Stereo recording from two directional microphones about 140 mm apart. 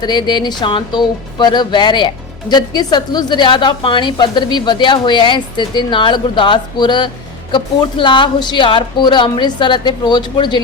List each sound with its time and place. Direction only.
0.0 s speech: 30° left (ahead or behind)